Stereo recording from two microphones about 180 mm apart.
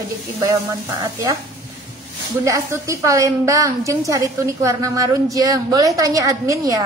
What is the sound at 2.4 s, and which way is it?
A woman's voice, 15° right (ahead or behind).